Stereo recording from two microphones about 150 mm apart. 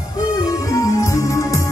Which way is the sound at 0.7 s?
20° left (ahead or behind).